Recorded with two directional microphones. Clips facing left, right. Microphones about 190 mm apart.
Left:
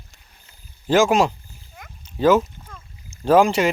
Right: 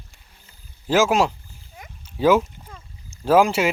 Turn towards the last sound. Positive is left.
turn(degrees=-5)  # may be behind; listen again after turning